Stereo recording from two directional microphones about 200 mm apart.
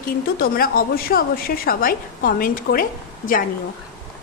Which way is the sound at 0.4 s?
45° left (ahead or behind).